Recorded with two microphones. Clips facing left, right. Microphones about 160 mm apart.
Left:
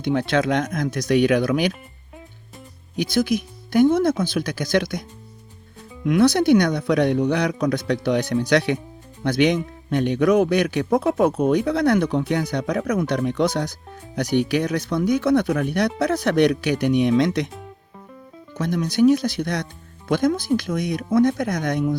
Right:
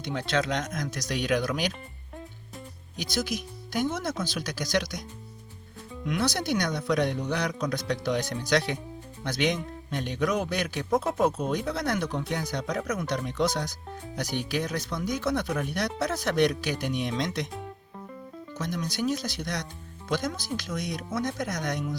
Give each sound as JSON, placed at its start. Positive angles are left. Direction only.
{"t": 0.0, "sound": "speech", "side_deg": 55}
{"t": 2.9, "sound": "speech", "side_deg": 60}
{"t": 6.1, "sound": "speech", "side_deg": 60}
{"t": 18.5, "sound": "speech", "side_deg": 60}